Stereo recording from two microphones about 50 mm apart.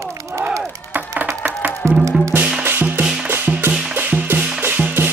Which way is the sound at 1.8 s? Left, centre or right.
Right.